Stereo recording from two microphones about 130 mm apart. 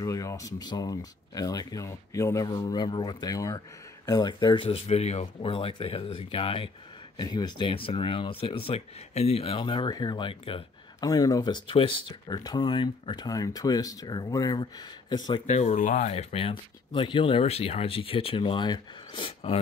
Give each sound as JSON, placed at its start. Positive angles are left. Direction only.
{"t": 0.0, "sound": "speech", "side_deg": 25}
{"t": 7.2, "sound": "speech", "side_deg": 35}
{"t": 11.1, "sound": "speech", "side_deg": 30}
{"t": 15.4, "sound": "speech", "side_deg": 60}
{"t": 16.0, "sound": "speech", "side_deg": 55}